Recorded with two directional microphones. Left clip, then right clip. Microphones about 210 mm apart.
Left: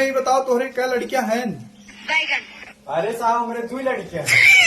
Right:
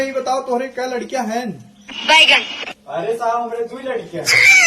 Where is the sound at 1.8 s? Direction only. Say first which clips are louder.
Right 10 dB; 55° right (ahead or behind).